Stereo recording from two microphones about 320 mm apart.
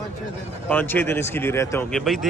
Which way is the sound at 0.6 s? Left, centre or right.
Centre.